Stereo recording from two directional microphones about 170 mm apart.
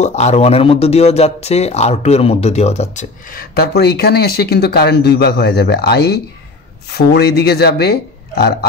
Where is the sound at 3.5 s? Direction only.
70° left (ahead or behind).